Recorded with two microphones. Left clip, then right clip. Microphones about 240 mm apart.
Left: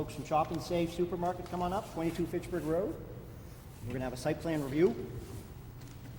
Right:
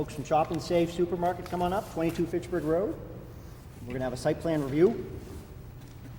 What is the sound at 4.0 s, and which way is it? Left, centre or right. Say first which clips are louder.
Speech: right 6 dB; right.